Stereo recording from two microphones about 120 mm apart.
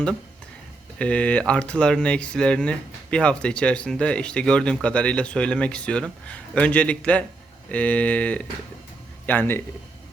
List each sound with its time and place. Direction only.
0.9 s speech: 10° left (ahead or behind)